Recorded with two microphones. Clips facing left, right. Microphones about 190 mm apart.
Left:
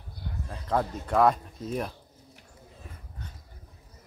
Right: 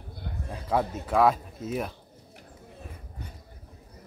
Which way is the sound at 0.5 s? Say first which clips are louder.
Right 1 dB; 10° right (ahead or behind).